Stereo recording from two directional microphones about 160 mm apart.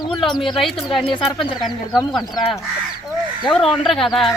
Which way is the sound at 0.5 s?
Centre (ahead or behind).